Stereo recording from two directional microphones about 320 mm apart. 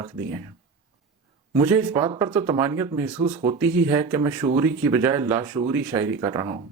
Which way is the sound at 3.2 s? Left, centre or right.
Right.